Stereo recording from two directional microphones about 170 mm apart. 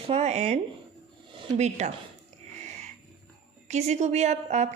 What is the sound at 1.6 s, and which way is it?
Speech, 40° right (ahead or behind).